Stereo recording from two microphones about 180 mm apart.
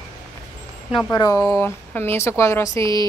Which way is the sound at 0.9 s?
20° left (ahead or behind).